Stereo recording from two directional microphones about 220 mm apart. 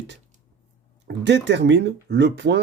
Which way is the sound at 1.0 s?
50° right (ahead or behind).